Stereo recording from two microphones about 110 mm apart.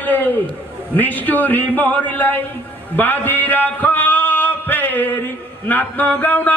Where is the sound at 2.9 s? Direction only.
15° left (ahead or behind).